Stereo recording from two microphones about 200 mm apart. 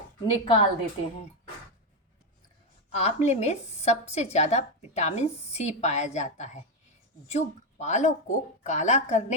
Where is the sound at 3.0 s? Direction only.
35° left (ahead or behind).